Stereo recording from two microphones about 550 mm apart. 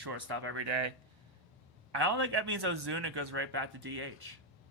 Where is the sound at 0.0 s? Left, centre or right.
Right.